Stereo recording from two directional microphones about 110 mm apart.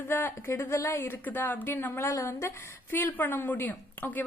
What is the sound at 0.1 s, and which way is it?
A woman's voice, 20° left (ahead or behind).